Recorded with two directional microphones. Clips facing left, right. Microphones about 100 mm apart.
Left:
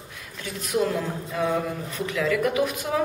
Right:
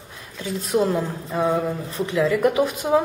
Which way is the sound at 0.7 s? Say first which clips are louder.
Right 3 dB; 25° right (ahead or behind).